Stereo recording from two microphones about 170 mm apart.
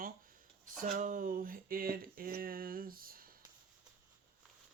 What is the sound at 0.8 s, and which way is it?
Speech, 50° right (ahead or behind).